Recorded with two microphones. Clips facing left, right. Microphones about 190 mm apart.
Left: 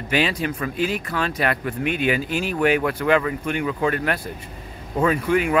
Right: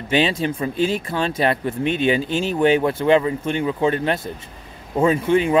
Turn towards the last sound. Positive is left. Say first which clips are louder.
# right 3 dB
turn(degrees=-25)  # may be behind; listen again after turning